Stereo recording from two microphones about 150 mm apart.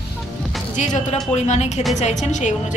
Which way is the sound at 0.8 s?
50° left (ahead or behind).